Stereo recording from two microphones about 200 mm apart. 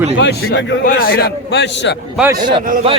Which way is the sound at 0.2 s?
65° left (ahead or behind).